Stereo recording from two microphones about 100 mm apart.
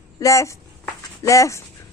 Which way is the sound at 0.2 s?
35° left (ahead or behind).